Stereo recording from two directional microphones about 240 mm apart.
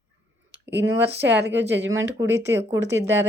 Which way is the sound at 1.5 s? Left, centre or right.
Right.